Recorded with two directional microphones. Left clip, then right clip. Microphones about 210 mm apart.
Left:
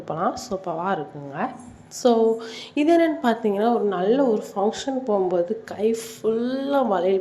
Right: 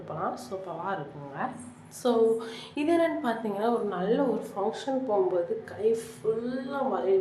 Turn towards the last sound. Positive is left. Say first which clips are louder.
# left 7 dB
turn(degrees=40)  # may be behind; listen again after turning